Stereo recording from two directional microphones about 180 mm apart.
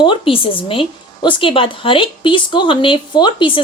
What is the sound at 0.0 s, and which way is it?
Speech, 30° left (ahead or behind).